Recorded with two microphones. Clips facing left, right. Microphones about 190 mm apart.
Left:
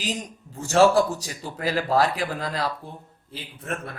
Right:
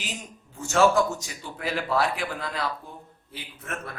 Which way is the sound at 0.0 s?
35° left (ahead or behind).